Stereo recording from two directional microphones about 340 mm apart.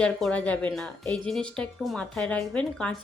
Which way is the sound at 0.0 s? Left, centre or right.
Centre.